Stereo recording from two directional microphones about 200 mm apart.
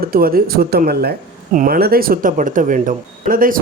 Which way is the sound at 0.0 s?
45° right (ahead or behind).